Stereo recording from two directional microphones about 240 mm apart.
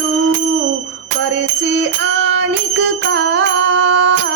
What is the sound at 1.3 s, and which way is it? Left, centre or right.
Music, right.